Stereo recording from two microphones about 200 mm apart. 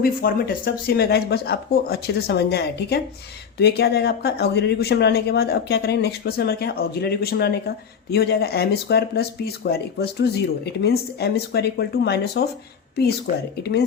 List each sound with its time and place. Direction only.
0.0 s speech: 45° left (ahead or behind)
13.6 s speech: 55° left (ahead or behind)